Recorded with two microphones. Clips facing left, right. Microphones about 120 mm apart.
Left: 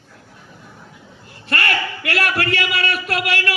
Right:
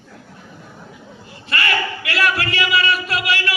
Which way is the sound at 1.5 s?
55° left (ahead or behind).